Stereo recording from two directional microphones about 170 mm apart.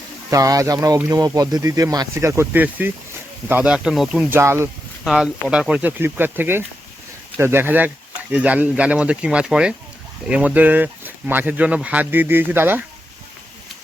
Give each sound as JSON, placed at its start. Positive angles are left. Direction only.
{"t": 0.3, "sound": "speech", "side_deg": -20}
{"t": 5.0, "sound": "speech", "side_deg": -5}